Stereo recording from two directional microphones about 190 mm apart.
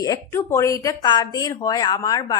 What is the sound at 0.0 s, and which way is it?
Speech, 15° left (ahead or behind).